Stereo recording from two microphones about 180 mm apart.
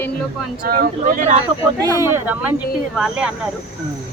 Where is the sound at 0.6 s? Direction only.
50° right (ahead or behind).